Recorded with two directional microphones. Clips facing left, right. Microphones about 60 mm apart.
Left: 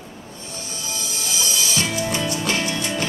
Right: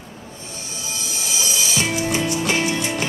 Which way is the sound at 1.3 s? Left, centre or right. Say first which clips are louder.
Right 1 dB; centre.